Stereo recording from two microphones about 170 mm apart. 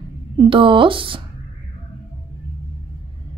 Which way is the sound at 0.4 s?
30° right (ahead or behind).